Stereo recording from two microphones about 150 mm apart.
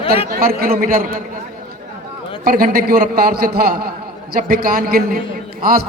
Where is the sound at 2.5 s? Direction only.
80° right.